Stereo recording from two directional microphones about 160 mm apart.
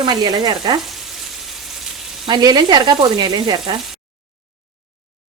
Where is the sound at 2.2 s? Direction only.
25° right (ahead or behind).